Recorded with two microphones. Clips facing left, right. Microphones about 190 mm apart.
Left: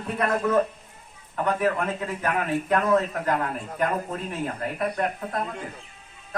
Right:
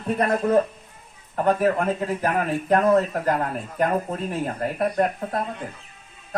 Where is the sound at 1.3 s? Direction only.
40° right (ahead or behind).